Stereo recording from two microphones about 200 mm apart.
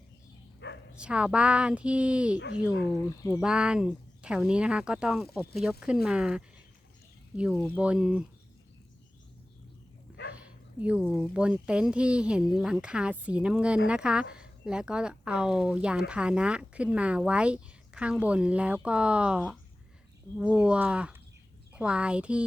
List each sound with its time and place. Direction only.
0.6 s bow-wow: 60° left (ahead or behind)
0.9 s speech: 5° right (ahead or behind)
3.0 s speech: 15° left (ahead or behind)
3.4 s speech: 5° right (ahead or behind)
7.8 s speech: 5° right (ahead or behind)
10.3 s speech: 5° right (ahead or behind)